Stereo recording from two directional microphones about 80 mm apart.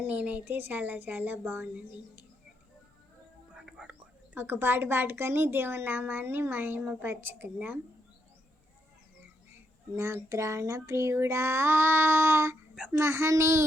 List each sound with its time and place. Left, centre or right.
0.0 s speech: right
3.5 s whispering: centre
4.4 s speech: right
9.9 s child singing: right